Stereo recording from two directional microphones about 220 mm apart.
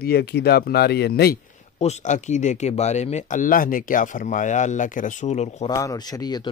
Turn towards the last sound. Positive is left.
turn(degrees=20)  # may be behind; listen again after turning